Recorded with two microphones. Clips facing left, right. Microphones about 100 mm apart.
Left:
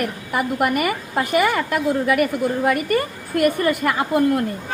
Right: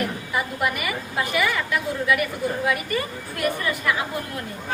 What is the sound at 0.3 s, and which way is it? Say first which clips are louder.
A woman's voice: left 6 dB; 50° left (ahead or behind).